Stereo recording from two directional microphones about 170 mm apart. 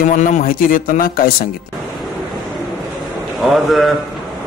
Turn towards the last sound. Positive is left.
turn(degrees=0)  # may be behind; listen again after turning